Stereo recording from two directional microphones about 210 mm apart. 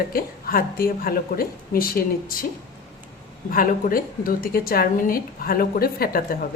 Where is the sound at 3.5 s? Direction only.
40° left (ahead or behind).